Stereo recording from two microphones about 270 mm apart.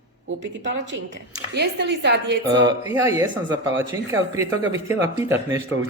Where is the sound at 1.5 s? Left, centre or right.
Right.